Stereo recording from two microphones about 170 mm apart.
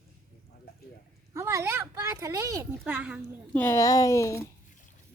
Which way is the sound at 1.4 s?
15° right (ahead or behind).